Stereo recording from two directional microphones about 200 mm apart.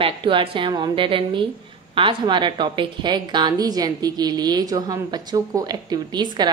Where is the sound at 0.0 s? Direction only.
25° right (ahead or behind).